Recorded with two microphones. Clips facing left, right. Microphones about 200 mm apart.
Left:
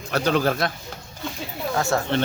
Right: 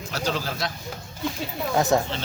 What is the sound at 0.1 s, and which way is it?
Speech, 60° left (ahead or behind).